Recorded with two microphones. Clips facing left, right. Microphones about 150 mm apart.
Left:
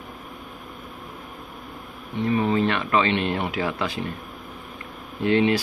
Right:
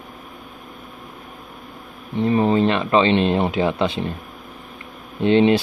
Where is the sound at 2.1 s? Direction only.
35° right (ahead or behind).